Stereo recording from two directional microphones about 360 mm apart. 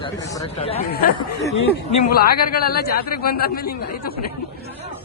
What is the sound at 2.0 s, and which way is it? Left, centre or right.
Speech, left.